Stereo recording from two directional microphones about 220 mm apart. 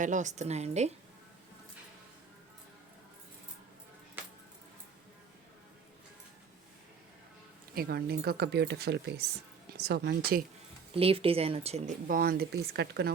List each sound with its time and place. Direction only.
0.0 s speech: 35° right (ahead or behind)
7.8 s speech: 45° right (ahead or behind)
10.9 s speech: 25° right (ahead or behind); by 13.1 s 50° right (ahead or behind)